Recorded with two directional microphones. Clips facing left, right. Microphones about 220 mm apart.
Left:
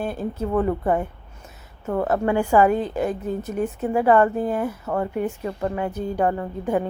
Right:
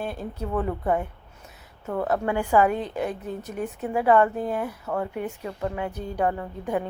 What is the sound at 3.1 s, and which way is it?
Speech, 45° left (ahead or behind).